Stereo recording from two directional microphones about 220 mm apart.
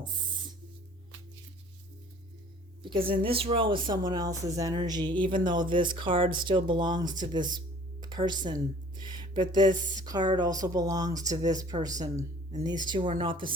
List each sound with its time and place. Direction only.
2.8 s a woman's voice: 25° right (ahead or behind)